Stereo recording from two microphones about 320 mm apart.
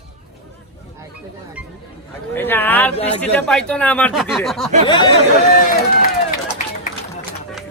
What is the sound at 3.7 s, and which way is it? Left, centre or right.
Speech, centre.